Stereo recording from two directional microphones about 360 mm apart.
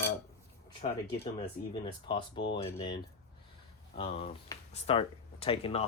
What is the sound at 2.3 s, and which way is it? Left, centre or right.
Speech, left.